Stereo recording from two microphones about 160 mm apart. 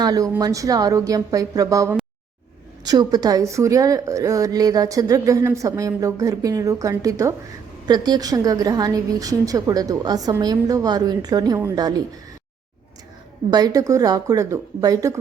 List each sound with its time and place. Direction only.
0.0 s a woman's voice: 25° right (ahead or behind)
13.5 s a woman's voice: 25° right (ahead or behind)